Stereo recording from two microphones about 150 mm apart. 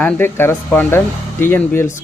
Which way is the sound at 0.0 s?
10° left (ahead or behind).